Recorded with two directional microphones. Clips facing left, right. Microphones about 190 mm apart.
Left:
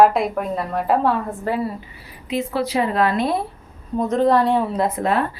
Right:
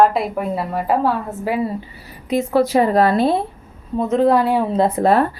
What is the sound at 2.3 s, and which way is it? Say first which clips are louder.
A woman's voice: right 6 dB; 45° right (ahead or behind).